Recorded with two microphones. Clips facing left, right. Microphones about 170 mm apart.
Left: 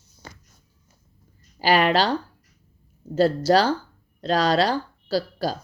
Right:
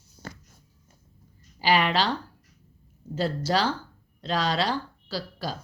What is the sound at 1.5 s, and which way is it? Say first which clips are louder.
Speech: left 4 dB; 45° left (ahead or behind).